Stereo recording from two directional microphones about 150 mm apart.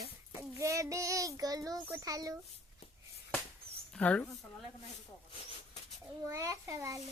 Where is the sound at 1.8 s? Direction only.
20° right (ahead or behind).